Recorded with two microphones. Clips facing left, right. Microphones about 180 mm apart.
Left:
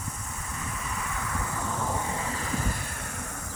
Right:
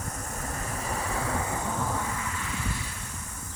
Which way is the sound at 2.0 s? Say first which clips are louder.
Left 2 dB; 30° left (ahead or behind).